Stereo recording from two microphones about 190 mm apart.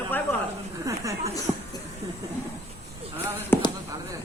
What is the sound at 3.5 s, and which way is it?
Speech, 10° left (ahead or behind).